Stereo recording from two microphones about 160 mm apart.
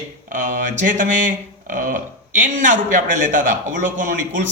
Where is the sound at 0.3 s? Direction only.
55° right (ahead or behind).